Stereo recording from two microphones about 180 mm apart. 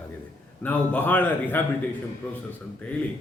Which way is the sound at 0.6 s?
10° left (ahead or behind).